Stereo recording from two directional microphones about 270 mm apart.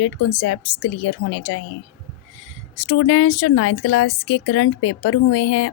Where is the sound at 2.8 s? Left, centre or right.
Left.